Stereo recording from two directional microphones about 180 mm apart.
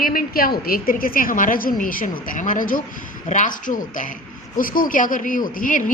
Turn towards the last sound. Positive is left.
turn(degrees=50)  # may be behind; listen again after turning